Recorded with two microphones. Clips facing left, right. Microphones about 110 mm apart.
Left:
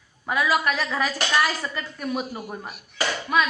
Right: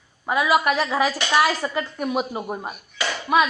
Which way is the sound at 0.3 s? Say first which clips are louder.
Right 3 dB; 10° right (ahead or behind).